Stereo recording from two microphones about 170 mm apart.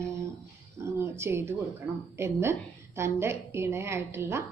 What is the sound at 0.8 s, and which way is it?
Speech, 15° right (ahead or behind).